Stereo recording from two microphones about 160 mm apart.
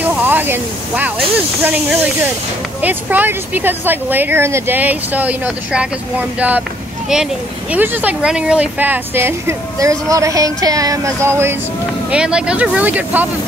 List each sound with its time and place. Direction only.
0.0 s speech: 10° right (ahead or behind)
7.7 s speech: 10° right (ahead or behind)